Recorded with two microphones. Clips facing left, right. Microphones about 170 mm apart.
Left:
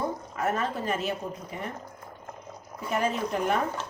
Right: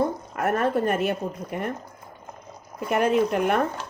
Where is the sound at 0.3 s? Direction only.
60° right (ahead or behind).